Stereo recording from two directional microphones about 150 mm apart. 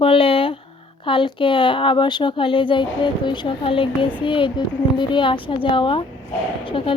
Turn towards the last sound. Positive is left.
turn(degrees=35)  # may be behind; listen again after turning